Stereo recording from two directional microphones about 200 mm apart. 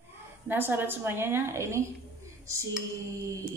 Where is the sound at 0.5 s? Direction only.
10° right (ahead or behind).